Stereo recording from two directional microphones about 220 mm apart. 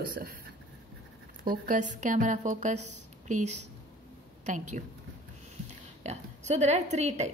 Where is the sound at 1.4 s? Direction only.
35° right (ahead or behind).